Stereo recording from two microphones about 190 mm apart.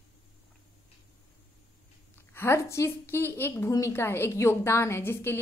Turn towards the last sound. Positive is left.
turn(degrees=10)  # may be behind; listen again after turning